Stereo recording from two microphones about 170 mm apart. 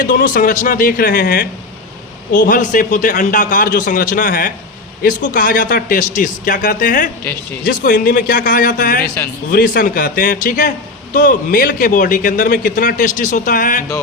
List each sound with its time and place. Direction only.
0.0 s a man's voice: 55° left (ahead or behind)